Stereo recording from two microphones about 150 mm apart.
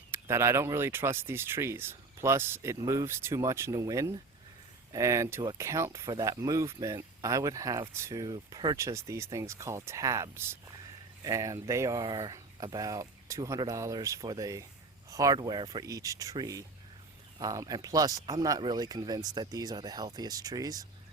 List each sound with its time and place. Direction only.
0.1 s speech: 15° right (ahead or behind)